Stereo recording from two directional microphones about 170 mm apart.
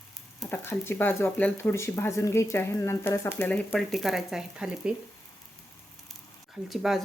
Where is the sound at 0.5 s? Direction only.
15° left (ahead or behind); by 4.9 s 5° right (ahead or behind).